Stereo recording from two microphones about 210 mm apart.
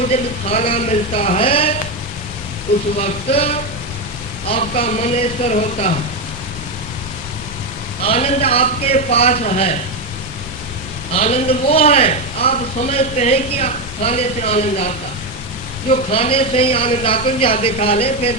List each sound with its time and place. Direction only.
0.1 s a man's voice: 30° left (ahead or behind)
3.0 s a man's voice: 30° left (ahead or behind)
8.0 s a man's voice: 30° left (ahead or behind)
11.1 s a man's voice: 30° left (ahead or behind)
16.1 s a man's voice: 25° left (ahead or behind)